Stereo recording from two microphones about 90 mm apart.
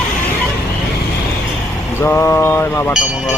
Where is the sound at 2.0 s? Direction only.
30° left (ahead or behind).